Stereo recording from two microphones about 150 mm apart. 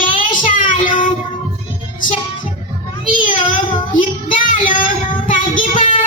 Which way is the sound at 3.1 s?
65° left (ahead or behind).